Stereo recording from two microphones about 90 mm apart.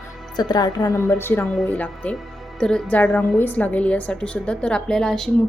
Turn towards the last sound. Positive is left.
turn(degrees=5)  # may be behind; listen again after turning